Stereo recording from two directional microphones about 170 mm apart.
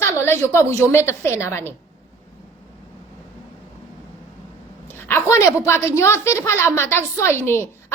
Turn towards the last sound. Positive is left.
turn(degrees=15)  # may be behind; listen again after turning